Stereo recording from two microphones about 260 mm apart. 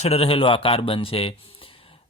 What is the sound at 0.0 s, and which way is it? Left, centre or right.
Speech, left.